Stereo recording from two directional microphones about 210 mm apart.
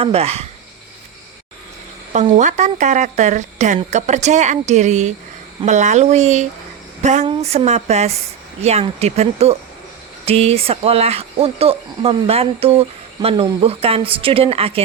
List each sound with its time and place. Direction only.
0.0 s speech: 30° right (ahead or behind)
2.1 s speech: 35° right (ahead or behind)